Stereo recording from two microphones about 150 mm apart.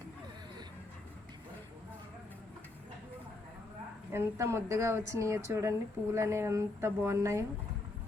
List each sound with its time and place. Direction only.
4.1 s a woman's voice: 20° right (ahead or behind)